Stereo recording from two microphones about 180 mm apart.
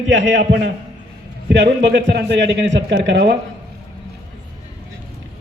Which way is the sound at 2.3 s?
80° right.